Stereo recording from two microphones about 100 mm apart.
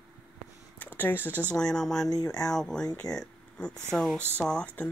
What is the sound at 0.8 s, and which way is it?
Speech, 20° left (ahead or behind).